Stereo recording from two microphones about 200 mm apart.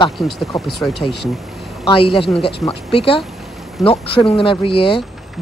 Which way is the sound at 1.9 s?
25° left (ahead or behind).